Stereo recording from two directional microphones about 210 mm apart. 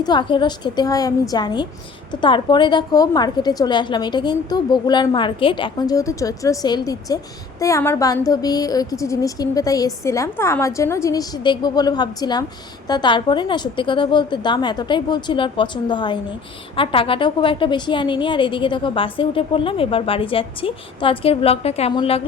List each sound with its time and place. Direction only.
0.0 s a woman's voice: 20° left (ahead or behind)